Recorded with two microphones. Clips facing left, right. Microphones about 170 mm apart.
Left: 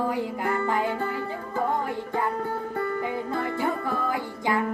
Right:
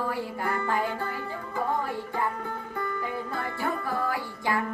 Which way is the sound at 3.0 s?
20° left (ahead or behind).